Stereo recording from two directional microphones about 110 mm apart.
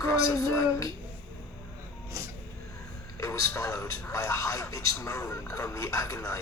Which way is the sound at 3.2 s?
30° left (ahead or behind).